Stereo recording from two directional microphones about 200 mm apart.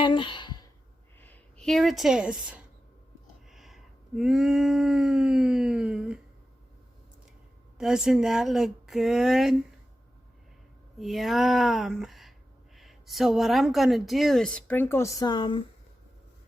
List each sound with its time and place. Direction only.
0.0 s sigh: 25° left (ahead or behind)
1.2 s speech: 5° left (ahead or behind)
3.5 s a sound: centre (ahead or behind)
7.8 s a woman's voice: 5° right (ahead or behind)
10.9 s a woman's voice: centre (ahead or behind); by 15.6 s 25° left (ahead or behind)